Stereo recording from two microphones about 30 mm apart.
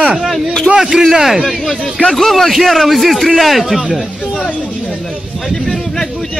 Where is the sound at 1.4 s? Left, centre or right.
Centre.